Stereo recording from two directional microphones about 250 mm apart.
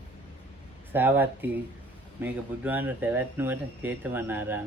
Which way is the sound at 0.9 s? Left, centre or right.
Centre.